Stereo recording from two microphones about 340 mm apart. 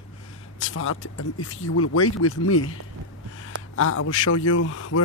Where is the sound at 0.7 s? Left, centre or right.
Left.